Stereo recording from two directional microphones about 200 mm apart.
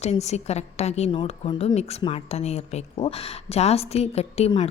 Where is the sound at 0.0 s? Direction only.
35° left (ahead or behind).